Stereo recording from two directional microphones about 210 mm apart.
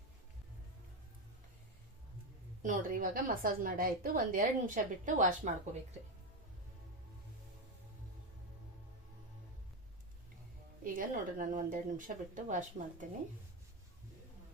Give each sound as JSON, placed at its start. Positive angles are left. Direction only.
{"t": 2.6, "sound": "a woman's voice", "side_deg": -40}
{"t": 10.8, "sound": "a woman's voice", "side_deg": -40}